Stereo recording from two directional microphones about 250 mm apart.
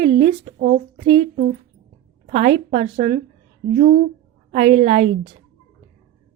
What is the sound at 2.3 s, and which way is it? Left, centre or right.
A woman's voice, right.